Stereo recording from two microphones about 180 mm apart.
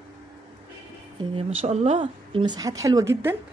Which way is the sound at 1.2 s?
35° right (ahead or behind).